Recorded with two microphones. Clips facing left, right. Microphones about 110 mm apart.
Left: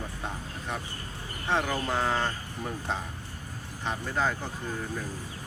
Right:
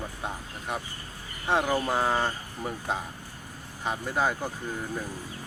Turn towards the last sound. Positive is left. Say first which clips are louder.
# right 2 dB
turn(degrees=-10)  # may be behind; listen again after turning